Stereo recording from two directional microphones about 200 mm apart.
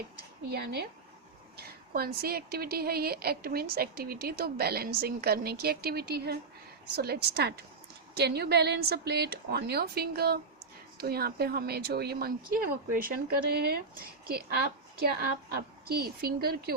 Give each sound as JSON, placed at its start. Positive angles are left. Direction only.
{"t": 0.5, "sound": "a woman's voice", "side_deg": -55}